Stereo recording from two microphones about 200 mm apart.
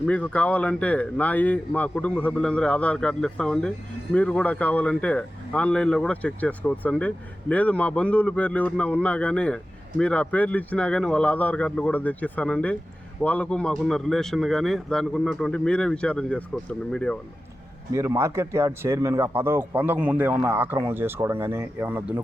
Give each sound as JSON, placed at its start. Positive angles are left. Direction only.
{"t": 0.0, "sound": "speech", "side_deg": 5}
{"t": 17.9, "sound": "speech", "side_deg": -15}